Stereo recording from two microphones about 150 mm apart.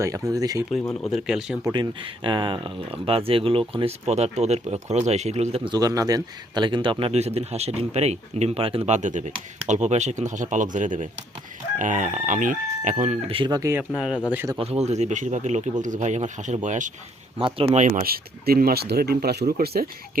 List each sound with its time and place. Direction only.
0.0 s speech: 20° right (ahead or behind)
1.0 s speech: centre (ahead or behind)
1.7 s speech: 35° right (ahead or behind)
5.7 s speech: 25° right (ahead or behind)
9.0 s speech: 55° right (ahead or behind)
13.2 s speech: 35° right (ahead or behind)
13.5 s speech: 20° right (ahead or behind)
13.9 s a man's voice: 5° right (ahead or behind)
14.6 s speech: 45° right (ahead or behind)
17.4 s speech: 35° right (ahead or behind)
17.7 s speech: 60° right (ahead or behind); by 19.9 s 85° right